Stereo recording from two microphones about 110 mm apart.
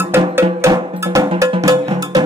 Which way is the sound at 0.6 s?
25° right (ahead or behind).